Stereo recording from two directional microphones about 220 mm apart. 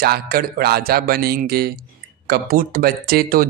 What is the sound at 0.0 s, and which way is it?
Speech, 45° right (ahead or behind).